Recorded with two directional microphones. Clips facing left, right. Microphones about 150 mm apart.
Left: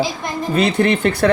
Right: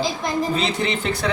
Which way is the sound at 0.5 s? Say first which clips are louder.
Left 7 dB; 60° left (ahead or behind).